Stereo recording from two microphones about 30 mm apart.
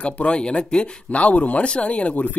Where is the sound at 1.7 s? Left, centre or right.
Left.